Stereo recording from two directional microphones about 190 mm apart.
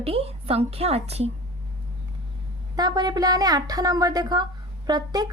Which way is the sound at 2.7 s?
20° right (ahead or behind).